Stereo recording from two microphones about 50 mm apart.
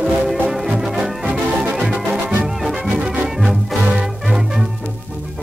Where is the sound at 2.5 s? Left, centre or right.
Centre.